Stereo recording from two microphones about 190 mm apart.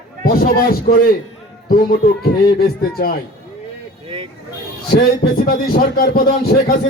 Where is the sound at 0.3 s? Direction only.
55° left (ahead or behind).